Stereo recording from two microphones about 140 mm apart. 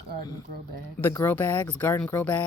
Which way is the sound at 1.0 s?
15° left (ahead or behind).